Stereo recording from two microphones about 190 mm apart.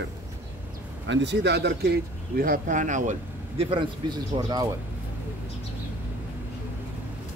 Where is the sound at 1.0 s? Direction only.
70° right (ahead or behind); by 3.6 s 40° right (ahead or behind).